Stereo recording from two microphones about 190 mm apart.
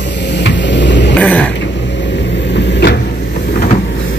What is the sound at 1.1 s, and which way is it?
Dog, 5° left (ahead or behind).